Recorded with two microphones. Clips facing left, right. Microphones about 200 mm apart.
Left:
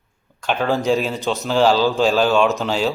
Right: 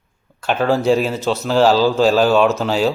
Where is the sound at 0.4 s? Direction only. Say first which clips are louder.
Right 3 dB; centre (ahead or behind).